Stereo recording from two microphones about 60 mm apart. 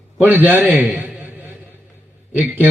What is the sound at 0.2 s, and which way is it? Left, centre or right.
Speech, right.